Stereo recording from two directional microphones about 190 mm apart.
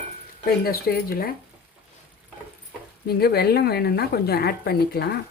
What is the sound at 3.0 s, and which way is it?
A woman's voice, 55° left (ahead or behind).